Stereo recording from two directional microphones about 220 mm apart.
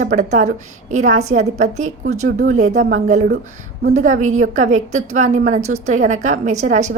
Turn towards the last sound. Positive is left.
turn(degrees=-35)  # may be behind; listen again after turning